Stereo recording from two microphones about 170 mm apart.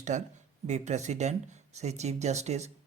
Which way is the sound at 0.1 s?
45° right (ahead or behind).